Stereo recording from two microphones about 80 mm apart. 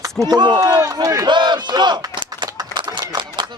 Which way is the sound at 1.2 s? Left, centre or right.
Right.